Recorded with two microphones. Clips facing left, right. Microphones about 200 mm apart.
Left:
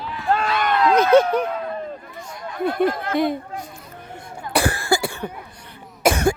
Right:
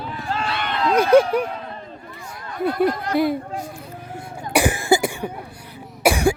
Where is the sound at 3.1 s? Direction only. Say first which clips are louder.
Right 2 dB; 5° right (ahead or behind).